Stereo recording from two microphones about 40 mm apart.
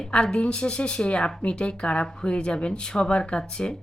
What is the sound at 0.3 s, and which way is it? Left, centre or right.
Speech, left.